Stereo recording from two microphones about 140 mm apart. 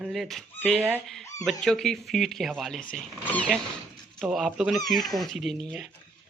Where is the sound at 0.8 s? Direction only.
15° right (ahead or behind).